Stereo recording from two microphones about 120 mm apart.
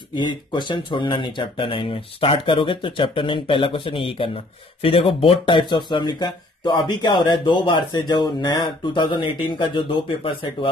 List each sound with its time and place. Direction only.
0.1 s speech: 40° left (ahead or behind)